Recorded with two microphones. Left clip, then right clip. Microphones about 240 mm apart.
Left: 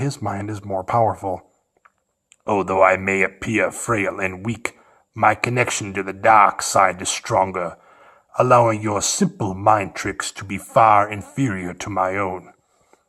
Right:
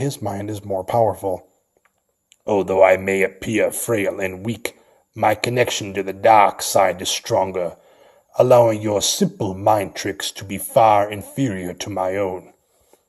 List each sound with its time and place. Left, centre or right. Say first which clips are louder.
0.0 s speech: right 1 dB; centre